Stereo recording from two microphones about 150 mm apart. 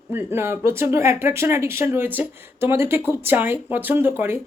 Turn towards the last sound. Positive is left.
turn(degrees=-15)  # may be behind; listen again after turning